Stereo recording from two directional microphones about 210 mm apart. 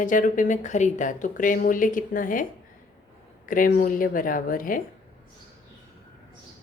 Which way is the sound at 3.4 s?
40° left (ahead or behind).